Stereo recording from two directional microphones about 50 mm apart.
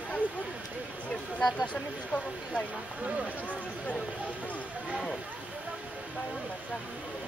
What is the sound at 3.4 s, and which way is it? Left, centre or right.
Speech, left.